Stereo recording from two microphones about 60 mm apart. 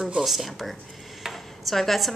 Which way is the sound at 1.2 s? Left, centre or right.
Centre.